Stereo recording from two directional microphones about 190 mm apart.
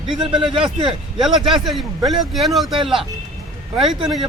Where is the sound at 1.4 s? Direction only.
Centre (ahead or behind).